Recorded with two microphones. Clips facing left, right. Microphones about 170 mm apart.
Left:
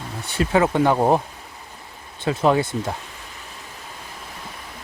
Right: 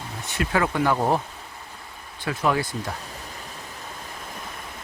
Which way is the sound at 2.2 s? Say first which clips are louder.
Left 5 dB; 25° left (ahead or behind).